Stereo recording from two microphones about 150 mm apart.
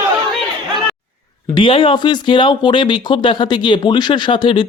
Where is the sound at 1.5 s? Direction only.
35° left (ahead or behind).